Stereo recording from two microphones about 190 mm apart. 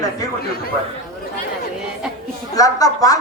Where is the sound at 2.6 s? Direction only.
20° left (ahead or behind).